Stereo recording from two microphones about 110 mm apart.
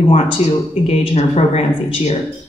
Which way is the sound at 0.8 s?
75° left (ahead or behind).